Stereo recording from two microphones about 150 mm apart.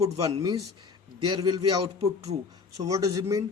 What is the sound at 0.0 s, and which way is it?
Speech, 25° right (ahead or behind).